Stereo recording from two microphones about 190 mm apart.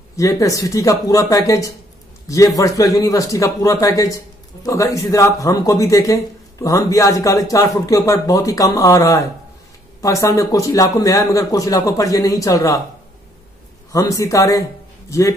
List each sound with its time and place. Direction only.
0.1 s a man's voice: 15° left (ahead or behind)
13.9 s a man's voice: 15° left (ahead or behind)